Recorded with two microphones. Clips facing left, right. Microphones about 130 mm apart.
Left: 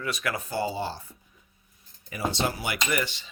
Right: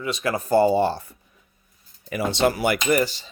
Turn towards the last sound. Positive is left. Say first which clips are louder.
# right 8 dB
turn(degrees=-40)  # may be behind; listen again after turning